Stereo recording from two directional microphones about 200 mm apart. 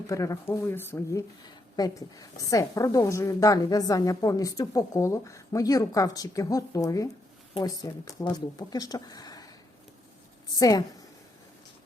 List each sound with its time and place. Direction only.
0.1 s a woman's voice: 15° left (ahead or behind)
10.5 s a woman's voice: 20° left (ahead or behind)